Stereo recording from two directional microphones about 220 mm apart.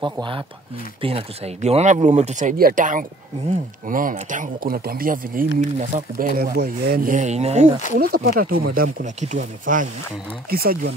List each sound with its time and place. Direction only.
0.0 s speech: 20° right (ahead or behind)
8.0 s speech: 45° right (ahead or behind)